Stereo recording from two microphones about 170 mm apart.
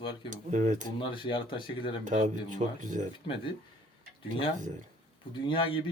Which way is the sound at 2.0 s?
45° right (ahead or behind).